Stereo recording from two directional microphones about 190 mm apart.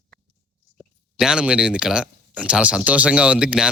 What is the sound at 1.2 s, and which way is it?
Speech, 5° right (ahead or behind).